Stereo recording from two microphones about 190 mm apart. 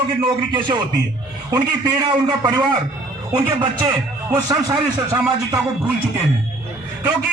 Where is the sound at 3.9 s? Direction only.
20° right (ahead or behind).